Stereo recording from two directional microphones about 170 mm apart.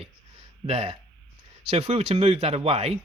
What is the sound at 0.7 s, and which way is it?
Speech, 35° right (ahead or behind).